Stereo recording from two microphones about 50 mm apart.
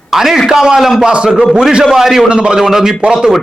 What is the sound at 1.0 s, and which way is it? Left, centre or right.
Speech, centre.